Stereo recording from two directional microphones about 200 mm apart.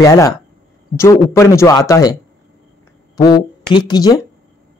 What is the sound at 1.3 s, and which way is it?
Speech, 15° left (ahead or behind).